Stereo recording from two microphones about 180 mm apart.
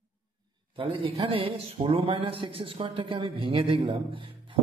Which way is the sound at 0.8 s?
30° right (ahead or behind).